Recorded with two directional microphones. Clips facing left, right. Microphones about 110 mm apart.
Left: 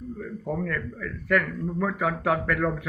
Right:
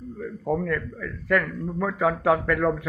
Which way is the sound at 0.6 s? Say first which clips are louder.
Right 3 dB; 10° right (ahead or behind).